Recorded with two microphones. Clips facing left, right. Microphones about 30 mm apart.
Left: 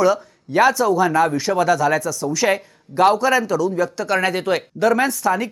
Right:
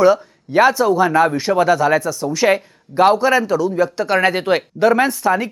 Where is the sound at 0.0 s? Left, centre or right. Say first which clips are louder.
Right 4 dB; centre.